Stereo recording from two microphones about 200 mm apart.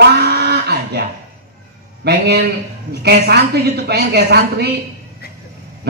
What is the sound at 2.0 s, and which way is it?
A man's voice, 55° right (ahead or behind).